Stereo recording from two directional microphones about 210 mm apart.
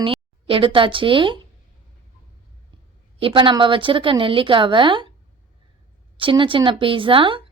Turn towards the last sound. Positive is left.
turn(degrees=-25)  # may be behind; listen again after turning